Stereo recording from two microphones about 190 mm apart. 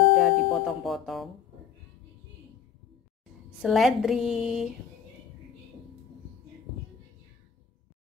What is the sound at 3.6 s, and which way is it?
Speech, centre (ahead or behind).